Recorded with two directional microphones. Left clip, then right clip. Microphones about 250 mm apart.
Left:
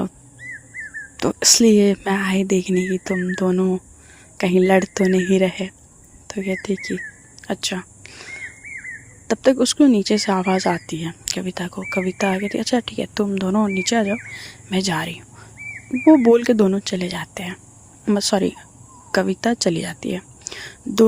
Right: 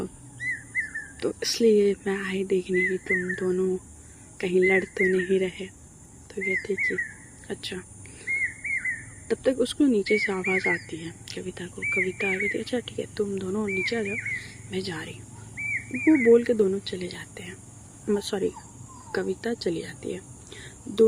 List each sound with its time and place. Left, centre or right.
1.1 s speech: left
7.4 s a sound: left
9.2 s speech: left